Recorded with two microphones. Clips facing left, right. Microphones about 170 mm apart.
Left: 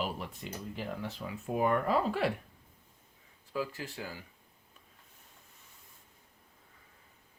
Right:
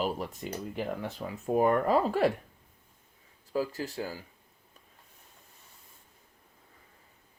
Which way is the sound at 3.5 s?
40° right (ahead or behind).